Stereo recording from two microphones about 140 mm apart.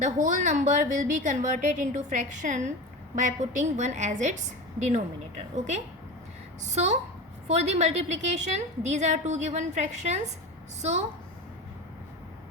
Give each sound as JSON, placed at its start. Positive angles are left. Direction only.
{"t": 0.0, "sound": "a woman's voice", "side_deg": -60}